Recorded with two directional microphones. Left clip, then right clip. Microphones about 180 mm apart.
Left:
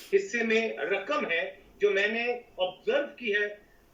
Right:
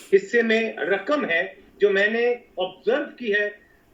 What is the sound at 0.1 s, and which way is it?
Speech, 25° right (ahead or behind).